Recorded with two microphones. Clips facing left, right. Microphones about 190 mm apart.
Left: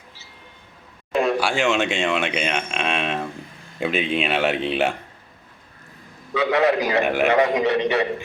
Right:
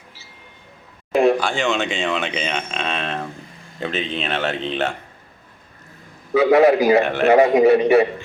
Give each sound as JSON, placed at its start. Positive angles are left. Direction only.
{"t": 1.4, "sound": "speech", "side_deg": 10}
{"t": 6.3, "sound": "a man's voice", "side_deg": -25}
{"t": 7.0, "sound": "speech", "side_deg": 10}
{"t": 7.3, "sound": "a man's voice", "side_deg": -30}